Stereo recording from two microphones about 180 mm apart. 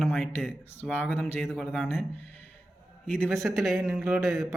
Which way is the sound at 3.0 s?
5° left (ahead or behind).